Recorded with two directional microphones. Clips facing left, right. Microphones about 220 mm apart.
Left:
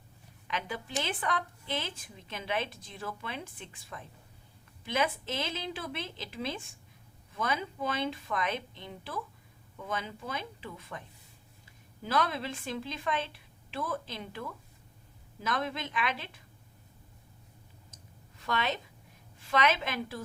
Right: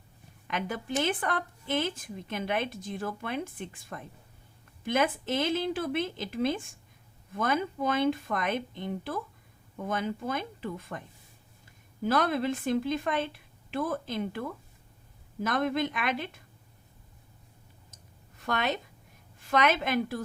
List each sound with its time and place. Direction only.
0.4 s a woman's voice: 50° right (ahead or behind)
18.3 s a woman's voice: 50° right (ahead or behind)